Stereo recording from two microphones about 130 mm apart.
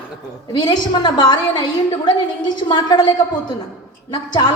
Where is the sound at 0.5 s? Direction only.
35° left (ahead or behind).